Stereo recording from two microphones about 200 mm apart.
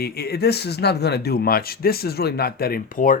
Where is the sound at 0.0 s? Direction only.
50° left (ahead or behind).